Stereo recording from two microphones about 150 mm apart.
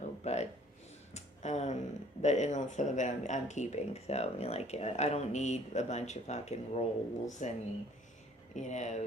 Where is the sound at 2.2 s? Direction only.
50° left (ahead or behind).